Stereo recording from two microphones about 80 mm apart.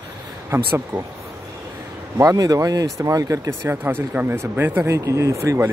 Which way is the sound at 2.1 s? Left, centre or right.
Right.